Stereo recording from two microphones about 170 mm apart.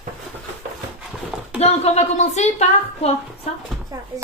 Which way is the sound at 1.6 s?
40° left (ahead or behind).